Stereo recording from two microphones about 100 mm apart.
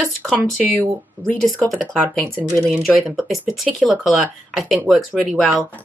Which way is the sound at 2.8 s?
5° right (ahead or behind).